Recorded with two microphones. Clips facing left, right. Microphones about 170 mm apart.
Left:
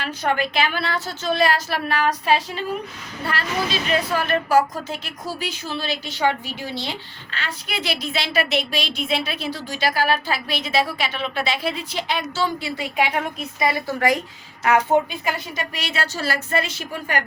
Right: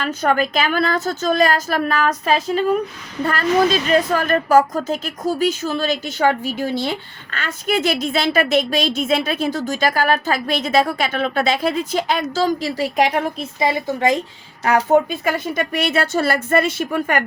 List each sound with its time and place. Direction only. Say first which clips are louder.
0.0 s speech: right 5 dB; 45° right (ahead or behind)
13.6 s a woman's voice: right 2 dB; 25° right (ahead or behind)
14.6 s speech: right 3 dB; 35° right (ahead or behind)
15.3 s speech: right 6 dB; 55° right (ahead or behind)